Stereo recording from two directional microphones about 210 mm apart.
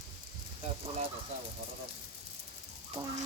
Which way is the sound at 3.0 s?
25° right (ahead or behind).